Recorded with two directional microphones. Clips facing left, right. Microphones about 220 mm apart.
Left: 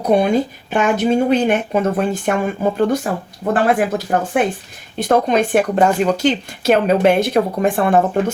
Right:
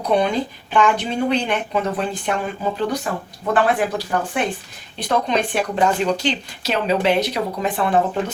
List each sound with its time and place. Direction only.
0.0 s speech: 50° left (ahead or behind)